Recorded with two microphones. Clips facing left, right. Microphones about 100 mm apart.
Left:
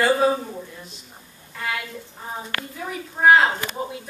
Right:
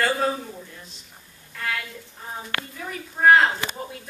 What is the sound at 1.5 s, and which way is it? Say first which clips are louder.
A woman's voice: left 1 dB; 10° left (ahead or behind).